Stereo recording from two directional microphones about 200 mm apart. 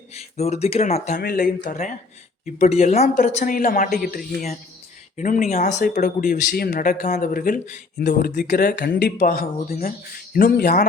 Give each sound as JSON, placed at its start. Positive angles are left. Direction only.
{"t": 0.1, "sound": "speech", "side_deg": 30}
{"t": 1.2, "sound": "speech", "side_deg": 45}